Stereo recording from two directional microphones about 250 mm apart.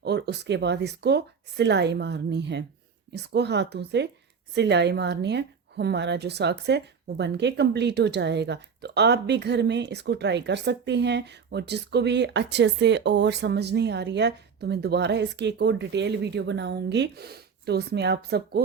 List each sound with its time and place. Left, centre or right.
0.0 s a woman's voice: right